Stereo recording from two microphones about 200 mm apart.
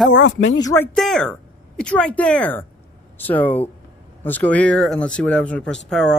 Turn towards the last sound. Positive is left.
turn(degrees=5)  # may be behind; listen again after turning